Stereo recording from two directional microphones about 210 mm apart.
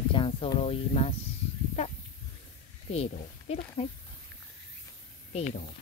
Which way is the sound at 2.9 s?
30° left (ahead or behind).